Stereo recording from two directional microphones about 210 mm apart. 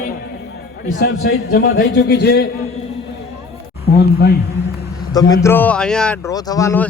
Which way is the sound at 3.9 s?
50° left (ahead or behind).